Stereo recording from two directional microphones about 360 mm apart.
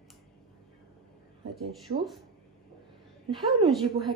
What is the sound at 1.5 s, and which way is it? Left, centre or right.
Speech, centre.